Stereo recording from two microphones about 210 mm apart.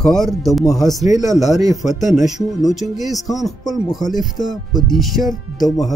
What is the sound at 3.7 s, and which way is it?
Speech, 20° left (ahead or behind).